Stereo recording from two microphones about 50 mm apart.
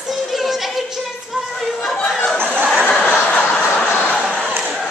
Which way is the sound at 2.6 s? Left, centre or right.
Centre.